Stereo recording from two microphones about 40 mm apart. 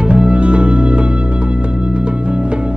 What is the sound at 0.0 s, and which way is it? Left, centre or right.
Music, right.